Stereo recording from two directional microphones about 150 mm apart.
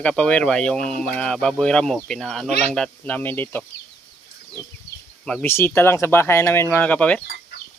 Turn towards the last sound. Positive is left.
turn(degrees=10)  # may be behind; listen again after turning